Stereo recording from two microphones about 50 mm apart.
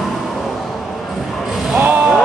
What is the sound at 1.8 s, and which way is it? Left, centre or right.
Music, right.